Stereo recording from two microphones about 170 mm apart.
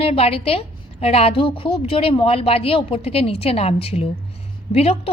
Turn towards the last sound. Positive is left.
turn(degrees=35)  # may be behind; listen again after turning